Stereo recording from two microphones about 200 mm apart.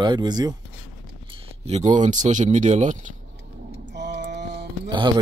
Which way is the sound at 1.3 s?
30° right (ahead or behind).